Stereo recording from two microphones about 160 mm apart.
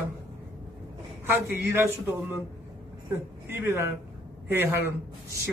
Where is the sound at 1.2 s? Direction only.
10° right (ahead or behind).